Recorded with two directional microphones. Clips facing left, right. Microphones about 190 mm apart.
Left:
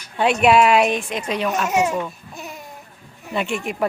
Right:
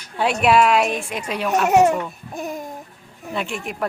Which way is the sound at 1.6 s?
60° right (ahead or behind).